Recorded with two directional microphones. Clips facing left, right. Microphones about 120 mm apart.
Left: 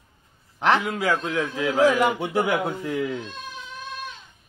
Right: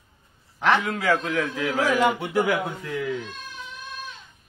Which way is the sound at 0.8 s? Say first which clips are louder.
Right 1 dB; 10° left (ahead or behind).